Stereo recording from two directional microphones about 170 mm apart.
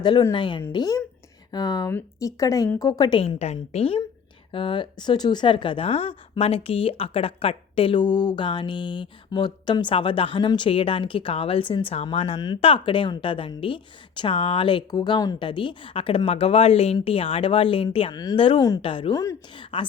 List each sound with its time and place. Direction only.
0.0 s a woman's voice: 30° left (ahead or behind)